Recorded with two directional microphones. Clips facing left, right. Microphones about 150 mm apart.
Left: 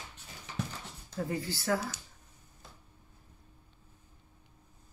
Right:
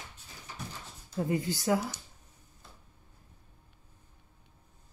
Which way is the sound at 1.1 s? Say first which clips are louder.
Right 4 dB; 20° right (ahead or behind).